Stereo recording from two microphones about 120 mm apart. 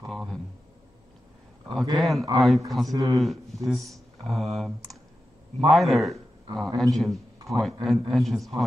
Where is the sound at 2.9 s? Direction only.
30° right (ahead or behind).